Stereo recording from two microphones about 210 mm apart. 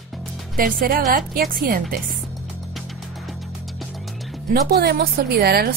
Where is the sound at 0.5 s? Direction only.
45° right (ahead or behind).